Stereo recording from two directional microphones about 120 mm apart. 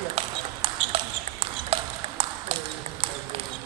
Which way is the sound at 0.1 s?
55° right (ahead or behind).